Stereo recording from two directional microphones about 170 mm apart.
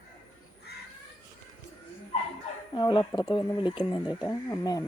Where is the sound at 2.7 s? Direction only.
25° left (ahead or behind).